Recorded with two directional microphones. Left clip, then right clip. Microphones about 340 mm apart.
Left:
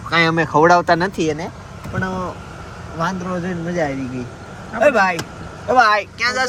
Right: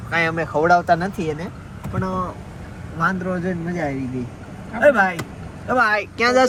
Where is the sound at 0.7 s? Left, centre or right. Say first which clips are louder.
Left 2 dB; left.